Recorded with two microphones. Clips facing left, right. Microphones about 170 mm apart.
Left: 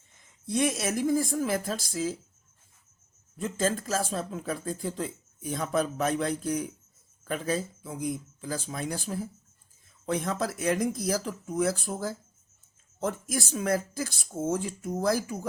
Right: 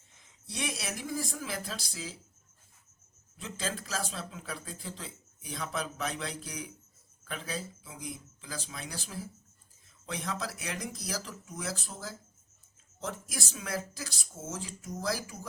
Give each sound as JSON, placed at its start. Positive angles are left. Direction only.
{"t": 0.4, "sound": "speech", "side_deg": 50}
{"t": 3.3, "sound": "speech", "side_deg": 45}